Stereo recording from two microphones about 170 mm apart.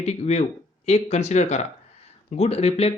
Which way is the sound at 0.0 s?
40° left (ahead or behind).